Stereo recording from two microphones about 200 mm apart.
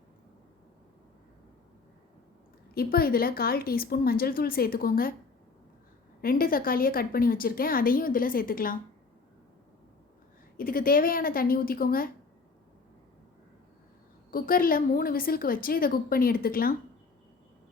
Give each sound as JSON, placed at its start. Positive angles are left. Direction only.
{"t": 2.7, "sound": "a woman's voice", "side_deg": 50}
{"t": 6.2, "sound": "a woman's voice", "side_deg": 45}
{"t": 10.6, "sound": "a woman's voice", "side_deg": 45}
{"t": 14.3, "sound": "a woman's voice", "side_deg": 45}